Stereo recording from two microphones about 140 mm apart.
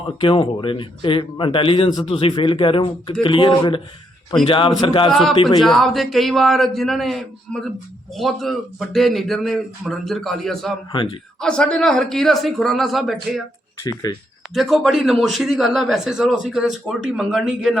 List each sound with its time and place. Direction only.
0.2 s speech: 35° left (ahead or behind)
4.7 s a man's voice: 25° left (ahead or behind)
5.6 s speech: centre (ahead or behind)
10.9 s speech: 35° left (ahead or behind)
11.3 s speech: 5° left (ahead or behind)
14.1 s a man's voice: 25° left (ahead or behind)
14.5 s speech: centre (ahead or behind)